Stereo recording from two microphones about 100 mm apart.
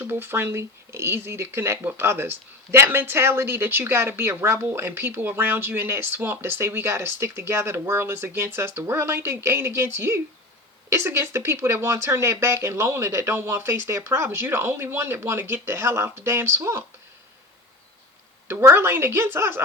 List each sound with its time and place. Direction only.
0.0 s a woman's voice: 20° right (ahead or behind)
18.6 s a woman's voice: 25° right (ahead or behind)